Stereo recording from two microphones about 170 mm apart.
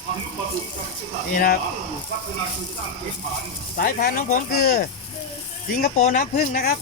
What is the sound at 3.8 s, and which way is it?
Speech, 55° left (ahead or behind).